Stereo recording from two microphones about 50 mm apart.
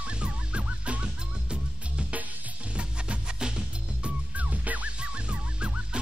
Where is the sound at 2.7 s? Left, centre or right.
Centre.